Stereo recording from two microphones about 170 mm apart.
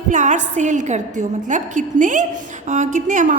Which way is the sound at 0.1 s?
45° right (ahead or behind).